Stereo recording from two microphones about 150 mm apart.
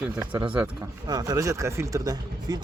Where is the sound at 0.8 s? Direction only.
25° right (ahead or behind).